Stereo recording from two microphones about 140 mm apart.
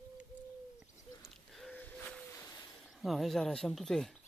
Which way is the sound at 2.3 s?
20° left (ahead or behind).